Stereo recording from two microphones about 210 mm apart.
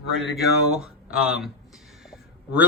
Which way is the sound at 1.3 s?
Centre (ahead or behind).